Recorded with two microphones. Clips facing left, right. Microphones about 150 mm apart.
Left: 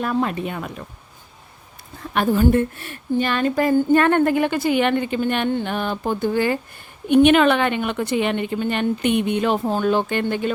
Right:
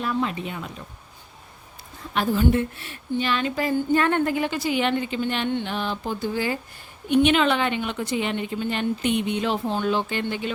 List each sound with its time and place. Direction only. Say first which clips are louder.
0.0 s speech: left 4 dB; 50° left (ahead or behind)
2.1 s speech: left 4 dB; 50° left (ahead or behind)